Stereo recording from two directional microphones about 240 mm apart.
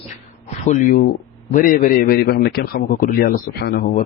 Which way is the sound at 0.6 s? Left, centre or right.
Left.